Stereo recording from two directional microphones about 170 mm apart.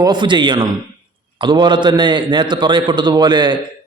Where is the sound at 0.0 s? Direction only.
25° right (ahead or behind).